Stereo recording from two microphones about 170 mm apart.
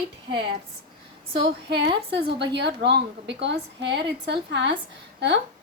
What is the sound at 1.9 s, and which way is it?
Speech, 30° right (ahead or behind).